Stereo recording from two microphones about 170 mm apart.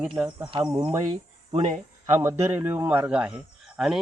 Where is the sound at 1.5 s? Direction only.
40° right (ahead or behind).